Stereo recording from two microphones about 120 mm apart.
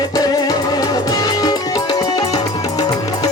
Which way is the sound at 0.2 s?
35° left (ahead or behind).